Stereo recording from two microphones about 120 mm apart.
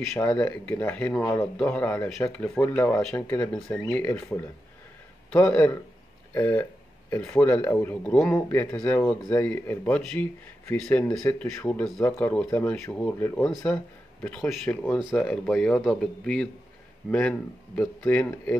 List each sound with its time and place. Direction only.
0.3 s a man's voice: 10° left (ahead or behind)
5.3 s a man's voice: 10° left (ahead or behind)